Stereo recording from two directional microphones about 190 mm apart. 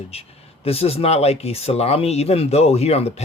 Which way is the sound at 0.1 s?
30° left (ahead or behind).